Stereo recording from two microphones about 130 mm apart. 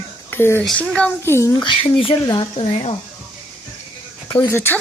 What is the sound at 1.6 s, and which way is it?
Speech, 40° left (ahead or behind).